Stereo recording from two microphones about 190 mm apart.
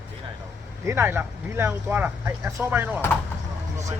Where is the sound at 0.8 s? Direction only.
15° right (ahead or behind).